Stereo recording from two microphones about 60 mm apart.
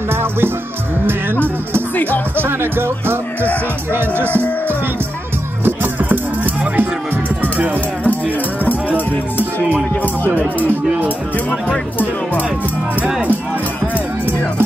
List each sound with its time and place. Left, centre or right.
0.1 s music: right
2.0 s music: left
2.3 s speech: right
3.9 s music: right
5.7 s music: right
8.6 s music: left